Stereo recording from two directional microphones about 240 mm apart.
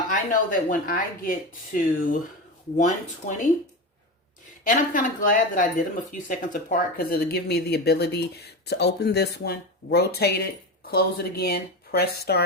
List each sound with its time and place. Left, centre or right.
0.1 s speech: left
4.6 s speech: left